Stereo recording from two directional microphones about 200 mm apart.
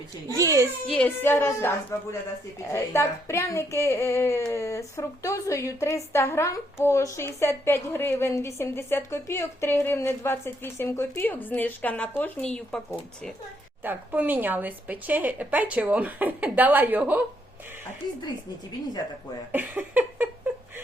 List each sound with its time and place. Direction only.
0.3 s speech: 15° right (ahead or behind)
0.9 s a woman's voice: 5° left (ahead or behind)
13.8 s speech: 10° right (ahead or behind)
18.0 s speech: 20° left (ahead or behind)
19.5 s speech: 10° right (ahead or behind)